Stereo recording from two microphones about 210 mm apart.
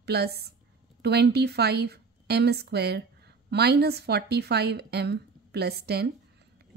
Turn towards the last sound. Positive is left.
turn(degrees=-50)  # may be behind; listen again after turning